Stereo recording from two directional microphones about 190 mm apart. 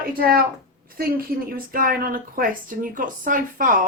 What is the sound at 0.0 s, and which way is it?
A woman's voice, 50° right (ahead or behind).